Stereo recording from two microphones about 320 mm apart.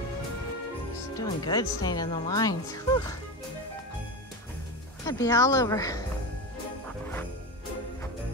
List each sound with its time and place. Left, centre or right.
1.2 s speech: centre
5.0 s speech: centre